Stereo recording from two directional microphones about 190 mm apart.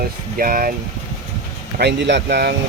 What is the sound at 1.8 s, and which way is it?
Speech, 65° right (ahead or behind).